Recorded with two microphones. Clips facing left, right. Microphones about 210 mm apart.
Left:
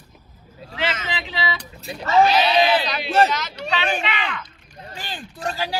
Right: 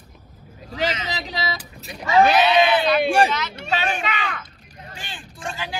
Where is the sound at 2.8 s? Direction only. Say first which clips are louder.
Right 2 dB; 55° right (ahead or behind).